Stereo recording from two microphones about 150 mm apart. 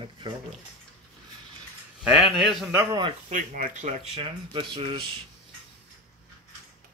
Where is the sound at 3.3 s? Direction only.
55° right (ahead or behind); by 4.7 s 35° right (ahead or behind).